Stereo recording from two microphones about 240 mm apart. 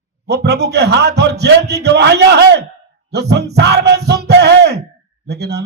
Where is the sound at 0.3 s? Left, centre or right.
Right.